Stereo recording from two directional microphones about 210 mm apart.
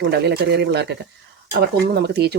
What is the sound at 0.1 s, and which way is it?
Speech, 50° right (ahead or behind).